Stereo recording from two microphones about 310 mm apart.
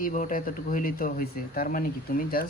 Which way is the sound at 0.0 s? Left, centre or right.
Left.